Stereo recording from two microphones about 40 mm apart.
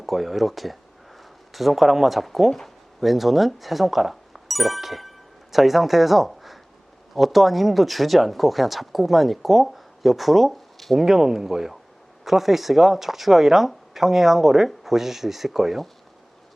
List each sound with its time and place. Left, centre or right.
0.0 s speech: centre
11.0 s speech: centre